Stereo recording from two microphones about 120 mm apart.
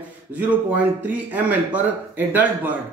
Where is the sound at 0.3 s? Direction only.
15° right (ahead or behind).